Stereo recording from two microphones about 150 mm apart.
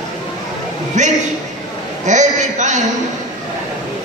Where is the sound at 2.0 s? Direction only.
55° right (ahead or behind).